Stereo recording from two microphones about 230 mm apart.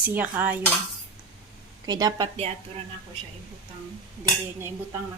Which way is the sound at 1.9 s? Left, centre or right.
Centre.